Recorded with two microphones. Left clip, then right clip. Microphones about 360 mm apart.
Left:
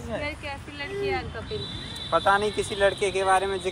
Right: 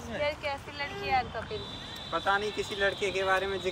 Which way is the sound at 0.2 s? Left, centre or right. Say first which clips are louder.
Right 2 dB; right.